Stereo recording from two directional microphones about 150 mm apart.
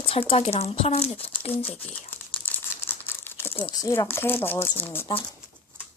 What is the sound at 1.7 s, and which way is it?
Crumpling, 10° left (ahead or behind).